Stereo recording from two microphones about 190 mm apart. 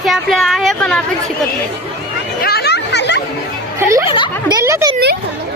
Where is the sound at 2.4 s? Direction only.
55° left (ahead or behind).